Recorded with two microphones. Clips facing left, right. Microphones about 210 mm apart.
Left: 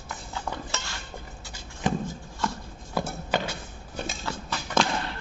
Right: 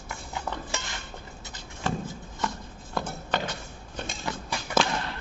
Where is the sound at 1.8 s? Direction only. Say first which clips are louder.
Left 3 dB; 15° left (ahead or behind).